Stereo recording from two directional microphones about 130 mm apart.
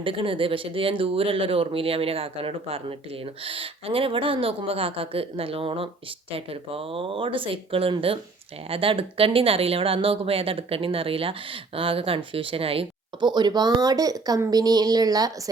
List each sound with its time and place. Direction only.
0.0 s speech: 40° right (ahead or behind)